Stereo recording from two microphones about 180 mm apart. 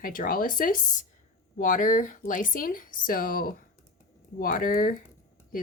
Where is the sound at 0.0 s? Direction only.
50° left (ahead or behind).